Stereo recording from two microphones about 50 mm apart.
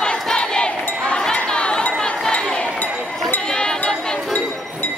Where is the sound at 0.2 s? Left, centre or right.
Centre.